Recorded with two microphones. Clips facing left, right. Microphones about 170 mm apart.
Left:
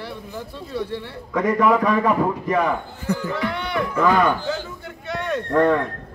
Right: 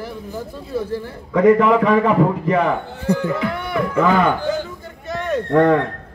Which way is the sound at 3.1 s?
35° right (ahead or behind).